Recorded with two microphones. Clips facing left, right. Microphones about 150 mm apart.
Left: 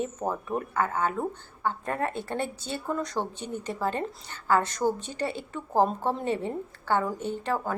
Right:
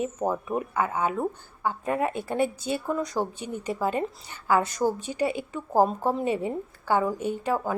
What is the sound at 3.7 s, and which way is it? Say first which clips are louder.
A woman's voice: right 3 dB; 5° right (ahead or behind).